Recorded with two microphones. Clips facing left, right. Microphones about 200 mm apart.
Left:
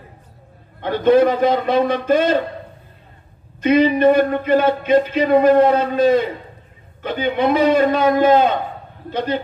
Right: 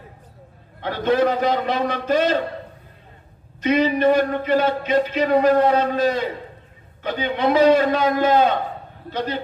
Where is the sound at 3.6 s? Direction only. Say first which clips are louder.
Left 4 dB; 55° left (ahead or behind).